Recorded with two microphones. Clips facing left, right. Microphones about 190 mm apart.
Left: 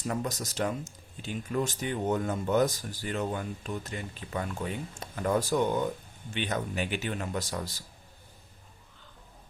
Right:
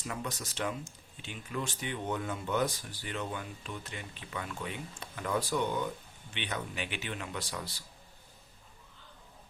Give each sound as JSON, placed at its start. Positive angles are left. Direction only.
{"t": 0.0, "sound": "speech", "side_deg": 40}